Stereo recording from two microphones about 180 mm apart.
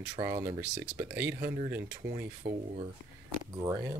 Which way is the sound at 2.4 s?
65° right (ahead or behind).